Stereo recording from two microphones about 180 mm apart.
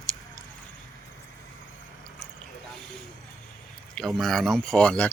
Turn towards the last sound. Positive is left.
turn(degrees=5)  # may be behind; listen again after turning